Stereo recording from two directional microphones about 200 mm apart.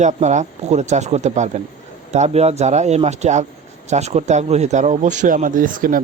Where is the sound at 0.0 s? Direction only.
35° right (ahead or behind).